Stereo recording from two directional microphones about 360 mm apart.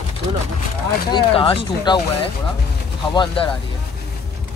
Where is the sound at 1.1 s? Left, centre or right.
Centre.